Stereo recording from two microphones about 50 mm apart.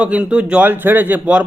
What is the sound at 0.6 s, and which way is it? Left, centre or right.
Speech, right.